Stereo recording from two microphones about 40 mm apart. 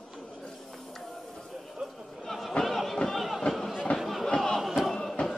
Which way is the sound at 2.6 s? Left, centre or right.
Centre.